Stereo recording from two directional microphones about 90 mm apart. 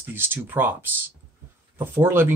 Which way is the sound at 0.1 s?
25° right (ahead or behind).